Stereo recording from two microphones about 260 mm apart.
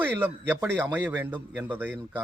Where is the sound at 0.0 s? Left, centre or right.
Centre.